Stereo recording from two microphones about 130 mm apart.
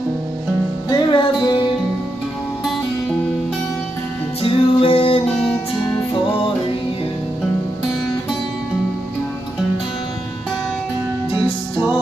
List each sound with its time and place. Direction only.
0.8 s music: 35° left (ahead or behind)
4.4 s music: 45° left (ahead or behind)